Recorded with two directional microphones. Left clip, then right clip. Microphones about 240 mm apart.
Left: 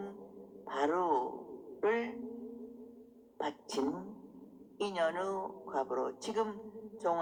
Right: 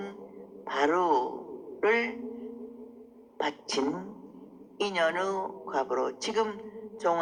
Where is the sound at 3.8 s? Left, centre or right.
Right.